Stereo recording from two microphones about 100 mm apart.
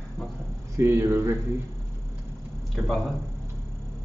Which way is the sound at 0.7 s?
25° right (ahead or behind).